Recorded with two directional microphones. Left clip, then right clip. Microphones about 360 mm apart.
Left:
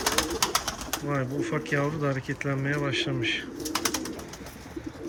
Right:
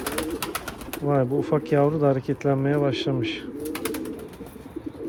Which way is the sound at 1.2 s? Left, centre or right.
Centre.